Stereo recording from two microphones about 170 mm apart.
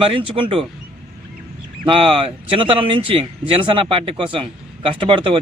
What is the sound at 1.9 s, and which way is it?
Speech, 35° right (ahead or behind).